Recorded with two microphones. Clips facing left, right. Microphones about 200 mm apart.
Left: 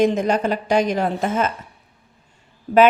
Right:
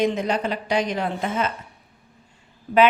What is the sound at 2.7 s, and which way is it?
Speech, 45° left (ahead or behind).